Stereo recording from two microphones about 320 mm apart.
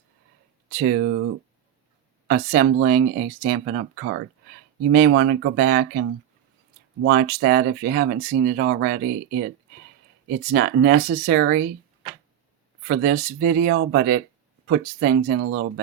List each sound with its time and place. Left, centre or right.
0.7 s speech: right
7.1 s speech: right
10.5 s speech: right
12.9 s speech: right